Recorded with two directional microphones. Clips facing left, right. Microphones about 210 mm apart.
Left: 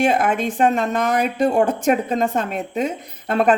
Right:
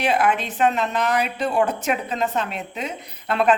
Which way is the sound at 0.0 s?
45° left (ahead or behind).